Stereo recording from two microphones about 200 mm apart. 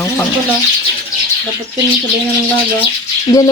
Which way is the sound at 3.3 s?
20° left (ahead or behind).